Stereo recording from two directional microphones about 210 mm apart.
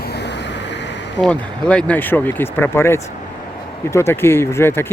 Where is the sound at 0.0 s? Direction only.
50° left (ahead or behind).